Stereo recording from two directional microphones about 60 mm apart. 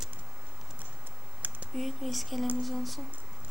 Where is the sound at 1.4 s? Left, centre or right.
Right.